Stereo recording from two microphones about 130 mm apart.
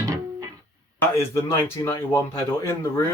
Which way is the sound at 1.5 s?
20° left (ahead or behind).